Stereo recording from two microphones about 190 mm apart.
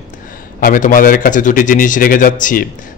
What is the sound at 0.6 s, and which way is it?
A man's voice, 45° left (ahead or behind).